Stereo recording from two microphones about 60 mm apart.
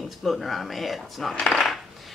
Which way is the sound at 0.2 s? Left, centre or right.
Centre.